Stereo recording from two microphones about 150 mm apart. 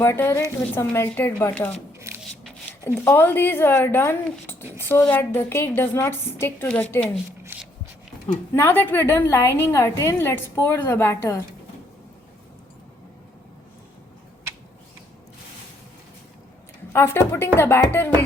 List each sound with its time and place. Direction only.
0.0 s a woman's voice: 15° left (ahead or behind)
2.8 s a woman's voice: 20° left (ahead or behind)
8.5 s a woman's voice: 15° left (ahead or behind)
16.9 s a woman's voice: 15° left (ahead or behind)